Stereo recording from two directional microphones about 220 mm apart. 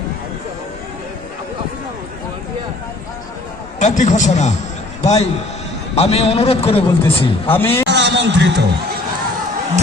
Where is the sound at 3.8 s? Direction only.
35° left (ahead or behind).